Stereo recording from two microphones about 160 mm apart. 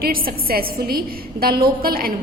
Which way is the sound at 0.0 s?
65° right (ahead or behind).